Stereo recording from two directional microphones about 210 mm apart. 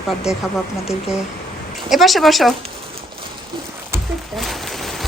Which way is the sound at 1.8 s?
Centre (ahead or behind).